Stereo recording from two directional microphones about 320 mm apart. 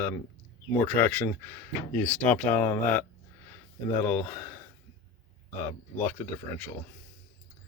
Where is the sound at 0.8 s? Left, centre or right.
Centre.